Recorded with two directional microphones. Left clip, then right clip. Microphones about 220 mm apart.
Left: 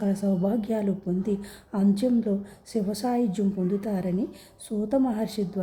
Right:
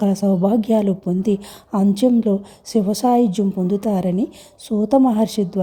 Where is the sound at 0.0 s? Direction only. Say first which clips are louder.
Right 9 dB; 30° right (ahead or behind).